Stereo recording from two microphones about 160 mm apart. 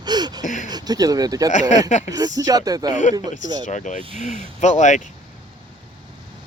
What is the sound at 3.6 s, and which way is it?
Speech, 50° left (ahead or behind).